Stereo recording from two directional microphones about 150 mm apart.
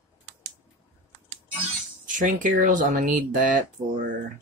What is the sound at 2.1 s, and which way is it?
Speech, 60° right (ahead or behind).